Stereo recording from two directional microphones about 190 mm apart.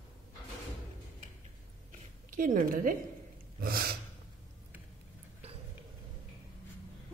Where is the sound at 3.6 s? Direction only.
50° right (ahead or behind).